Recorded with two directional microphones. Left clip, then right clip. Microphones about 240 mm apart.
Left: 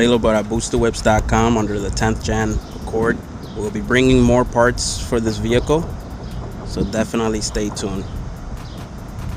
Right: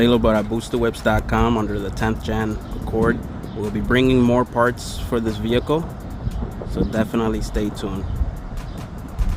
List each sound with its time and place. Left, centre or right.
0.0 s speech: centre
3.6 s speech: centre